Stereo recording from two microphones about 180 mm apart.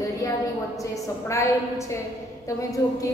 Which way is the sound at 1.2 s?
15° left (ahead or behind).